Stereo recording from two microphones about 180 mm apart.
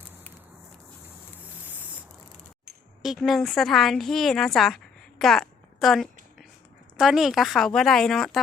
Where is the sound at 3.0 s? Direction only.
Centre (ahead or behind).